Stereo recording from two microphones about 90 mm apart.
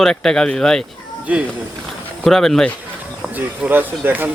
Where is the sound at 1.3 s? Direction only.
15° right (ahead or behind).